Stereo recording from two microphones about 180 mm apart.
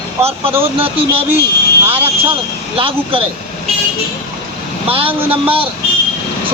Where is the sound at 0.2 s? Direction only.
35° right (ahead or behind).